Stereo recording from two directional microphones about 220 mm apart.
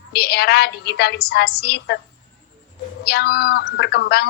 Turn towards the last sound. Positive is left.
turn(degrees=45)  # may be behind; listen again after turning